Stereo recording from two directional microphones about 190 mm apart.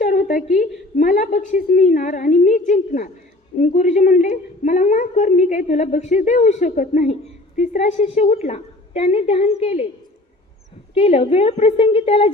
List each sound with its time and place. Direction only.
0.0 s a sound: 50° left (ahead or behind)
0.9 s a woman's voice: 45° left (ahead or behind)
10.9 s a woman's voice: 30° left (ahead or behind)